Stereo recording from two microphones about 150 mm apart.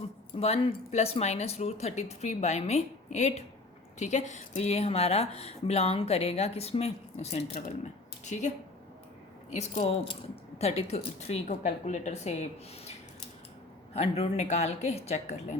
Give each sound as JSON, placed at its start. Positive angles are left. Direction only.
{"t": 0.3, "sound": "speech", "side_deg": 40}
{"t": 13.9, "sound": "speech", "side_deg": 45}